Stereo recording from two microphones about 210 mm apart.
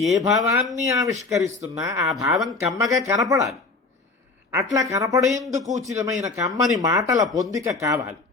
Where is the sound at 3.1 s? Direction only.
15° right (ahead or behind).